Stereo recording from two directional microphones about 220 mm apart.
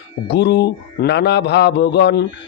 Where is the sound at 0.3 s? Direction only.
50° left (ahead or behind).